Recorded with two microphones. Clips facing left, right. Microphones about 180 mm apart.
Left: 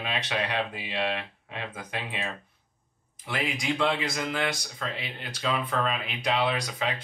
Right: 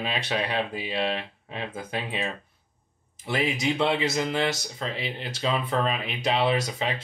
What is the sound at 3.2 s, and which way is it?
Speech, 25° right (ahead or behind).